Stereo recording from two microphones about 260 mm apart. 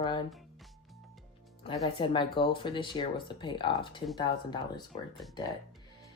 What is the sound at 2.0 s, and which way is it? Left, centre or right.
Speech, centre.